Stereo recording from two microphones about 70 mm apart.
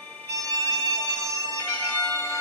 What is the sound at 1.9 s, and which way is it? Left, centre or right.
Bagpipes, left.